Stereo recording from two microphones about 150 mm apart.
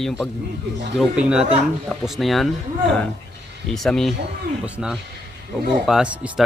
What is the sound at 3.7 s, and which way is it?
Speech, centre (ahead or behind).